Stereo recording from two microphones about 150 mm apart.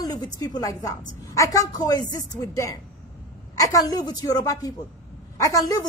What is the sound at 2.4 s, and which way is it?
A woman's voice, 20° left (ahead or behind).